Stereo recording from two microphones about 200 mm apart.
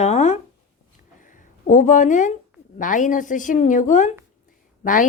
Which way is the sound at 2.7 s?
40° left (ahead or behind).